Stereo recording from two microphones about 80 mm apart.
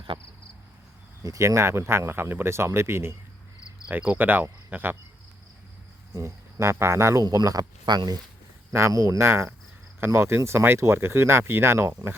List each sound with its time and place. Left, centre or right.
0.1 s cricket: right
1.2 s speech: right
3.8 s cricket: right
6.1 s speech: right
7.3 s speech: right
9.0 s speech: right